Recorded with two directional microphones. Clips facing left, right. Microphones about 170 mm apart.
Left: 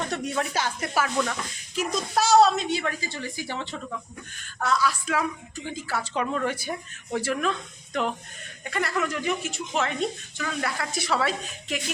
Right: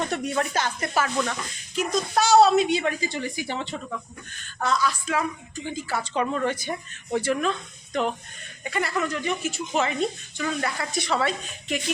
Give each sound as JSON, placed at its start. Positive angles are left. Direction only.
{"t": 0.1, "sound": "a woman's voice", "side_deg": -5}
{"t": 2.6, "sound": "a woman's voice", "side_deg": -20}
{"t": 4.4, "sound": "a woman's voice", "side_deg": 5}
{"t": 8.6, "sound": "a woman's voice", "side_deg": 0}